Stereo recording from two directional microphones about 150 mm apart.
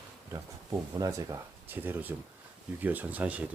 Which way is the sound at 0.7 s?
25° right (ahead or behind).